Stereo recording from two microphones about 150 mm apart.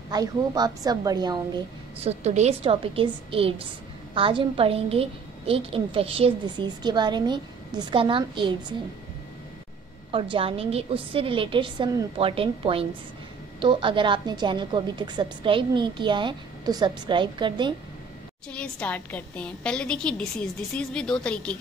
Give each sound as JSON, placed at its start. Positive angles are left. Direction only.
{"t": 0.1, "sound": "a woman's voice", "side_deg": -25}
{"t": 2.0, "sound": "a woman's voice", "side_deg": -45}
{"t": 10.1, "sound": "a woman's voice", "side_deg": -35}
{"t": 18.5, "sound": "a woman's voice", "side_deg": 10}